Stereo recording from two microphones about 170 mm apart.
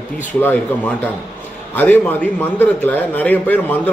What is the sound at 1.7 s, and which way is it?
A man's voice, 10° left (ahead or behind).